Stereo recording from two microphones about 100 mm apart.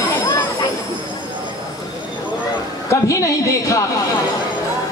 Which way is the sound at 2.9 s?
30° left (ahead or behind).